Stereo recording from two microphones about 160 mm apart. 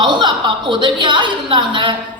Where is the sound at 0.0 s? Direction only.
30° right (ahead or behind).